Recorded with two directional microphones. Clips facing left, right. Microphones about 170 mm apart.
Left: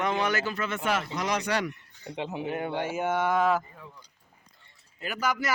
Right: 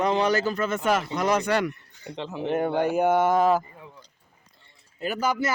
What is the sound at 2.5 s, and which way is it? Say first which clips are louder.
Speech: right 10 dB; 40° right (ahead or behind).